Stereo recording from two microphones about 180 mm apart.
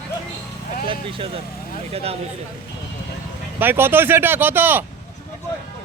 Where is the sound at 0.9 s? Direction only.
30° right (ahead or behind).